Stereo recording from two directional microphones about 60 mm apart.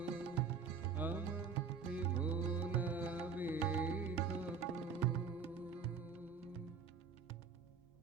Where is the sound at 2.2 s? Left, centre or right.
Right.